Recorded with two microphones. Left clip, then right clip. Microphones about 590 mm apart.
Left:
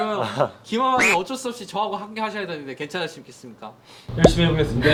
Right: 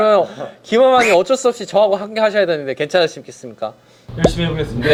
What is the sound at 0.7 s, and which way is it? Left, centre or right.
Speech, right.